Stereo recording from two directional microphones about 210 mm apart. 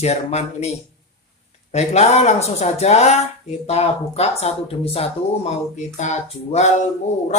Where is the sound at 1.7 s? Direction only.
30° left (ahead or behind).